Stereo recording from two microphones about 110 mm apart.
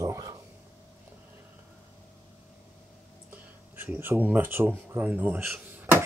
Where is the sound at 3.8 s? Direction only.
20° right (ahead or behind).